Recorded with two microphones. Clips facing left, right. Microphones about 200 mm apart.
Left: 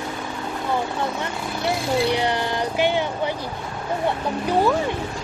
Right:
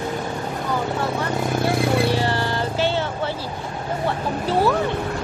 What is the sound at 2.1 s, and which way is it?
Music, 20° left (ahead or behind).